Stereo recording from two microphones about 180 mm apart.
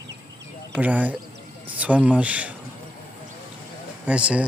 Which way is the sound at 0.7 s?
10° right (ahead or behind).